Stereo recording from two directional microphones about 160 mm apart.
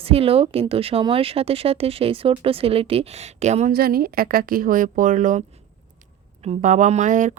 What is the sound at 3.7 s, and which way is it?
A woman's voice, 70° right (ahead or behind).